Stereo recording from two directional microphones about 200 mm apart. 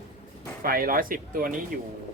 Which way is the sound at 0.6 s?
45° right (ahead or behind).